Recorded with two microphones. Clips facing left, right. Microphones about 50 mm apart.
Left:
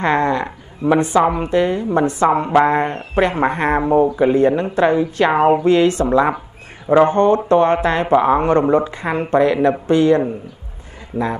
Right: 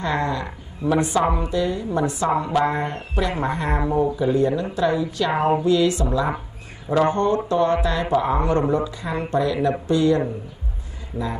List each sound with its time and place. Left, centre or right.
0.0 s a woman's voice: left